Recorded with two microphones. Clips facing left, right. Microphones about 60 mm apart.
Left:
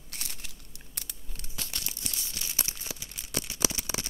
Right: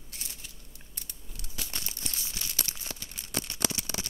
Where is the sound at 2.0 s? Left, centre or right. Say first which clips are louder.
Even; centre.